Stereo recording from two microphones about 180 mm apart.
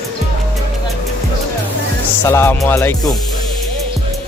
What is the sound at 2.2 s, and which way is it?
Music, 15° left (ahead or behind).